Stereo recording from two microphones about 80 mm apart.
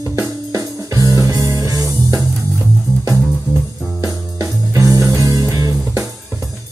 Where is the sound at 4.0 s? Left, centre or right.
Right.